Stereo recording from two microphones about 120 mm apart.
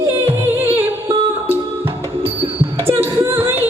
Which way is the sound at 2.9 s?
20° right (ahead or behind).